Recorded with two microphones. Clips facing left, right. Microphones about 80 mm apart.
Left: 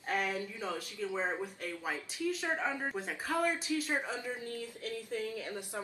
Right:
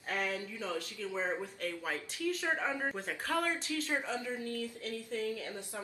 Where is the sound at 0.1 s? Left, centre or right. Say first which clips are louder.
Left 2 dB; left.